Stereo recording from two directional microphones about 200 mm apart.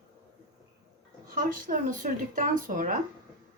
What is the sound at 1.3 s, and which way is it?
A woman's voice, 45° right (ahead or behind).